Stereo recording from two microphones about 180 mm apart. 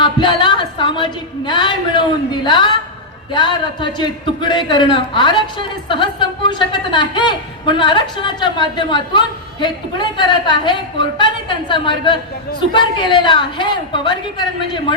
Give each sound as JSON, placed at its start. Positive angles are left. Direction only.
{"t": 0.0, "sound": "a woman's voice", "side_deg": 25}